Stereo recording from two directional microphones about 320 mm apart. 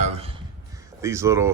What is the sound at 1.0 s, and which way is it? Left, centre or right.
Speech, centre.